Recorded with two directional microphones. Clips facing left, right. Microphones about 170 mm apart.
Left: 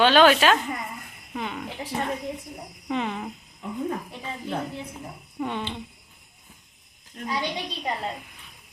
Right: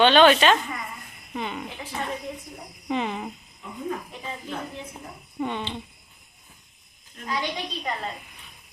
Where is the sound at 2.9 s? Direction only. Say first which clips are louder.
Right 1 dB; 5° right (ahead or behind).